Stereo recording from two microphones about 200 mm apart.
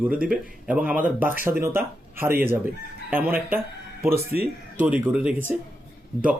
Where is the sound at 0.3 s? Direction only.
5° right (ahead or behind).